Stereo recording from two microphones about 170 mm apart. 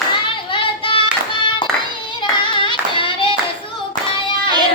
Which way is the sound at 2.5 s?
30° left (ahead or behind).